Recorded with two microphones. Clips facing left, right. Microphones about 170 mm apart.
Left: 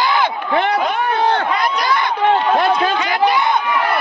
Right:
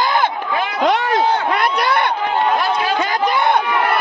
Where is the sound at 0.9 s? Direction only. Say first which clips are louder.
Right 3 dB; 90° right.